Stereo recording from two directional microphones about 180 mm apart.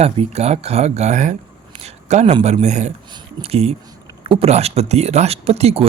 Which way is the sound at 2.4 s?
40° right (ahead or behind).